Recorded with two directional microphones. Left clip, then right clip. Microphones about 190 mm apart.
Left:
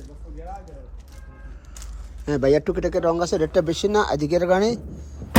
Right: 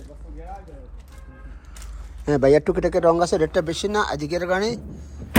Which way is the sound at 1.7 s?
10° left (ahead or behind).